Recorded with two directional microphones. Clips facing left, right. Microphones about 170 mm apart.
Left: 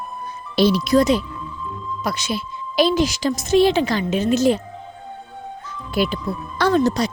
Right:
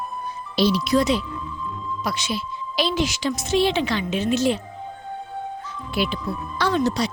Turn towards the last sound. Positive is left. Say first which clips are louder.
# left 4 dB
turn(degrees=45)  # may be behind; listen again after turning